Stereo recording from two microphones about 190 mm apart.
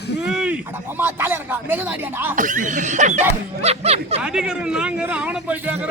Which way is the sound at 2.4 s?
45° right (ahead or behind).